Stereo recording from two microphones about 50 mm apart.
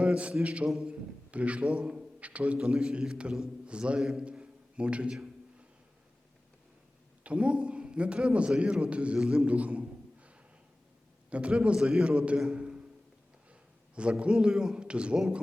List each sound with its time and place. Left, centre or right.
0.0 s a sound: right
0.4 s a man's voice: right
0.7 s a man's voice: centre
1.3 s a man's voice: right
2.6 s a man's voice: centre
4.2 s a sound: right
7.3 s a man's voice: right
12.5 s a sound: right
14.2 s a man's voice: centre